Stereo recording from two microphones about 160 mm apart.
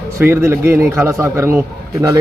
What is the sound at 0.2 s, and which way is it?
A man's voice, 15° right (ahead or behind).